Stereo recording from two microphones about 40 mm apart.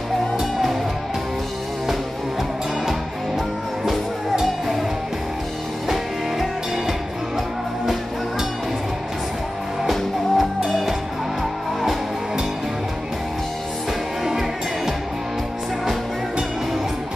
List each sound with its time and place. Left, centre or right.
0.4 s music: centre
3.8 s music: centre
6.9 s music: centre
9.8 s music: centre